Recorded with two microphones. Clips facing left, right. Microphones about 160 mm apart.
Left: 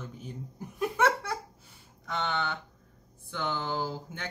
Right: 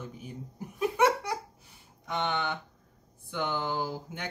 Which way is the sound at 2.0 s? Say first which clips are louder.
Right 1 dB; 15° right (ahead or behind).